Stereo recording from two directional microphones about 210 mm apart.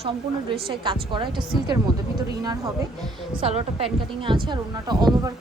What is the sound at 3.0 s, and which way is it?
Speech, 25° right (ahead or behind).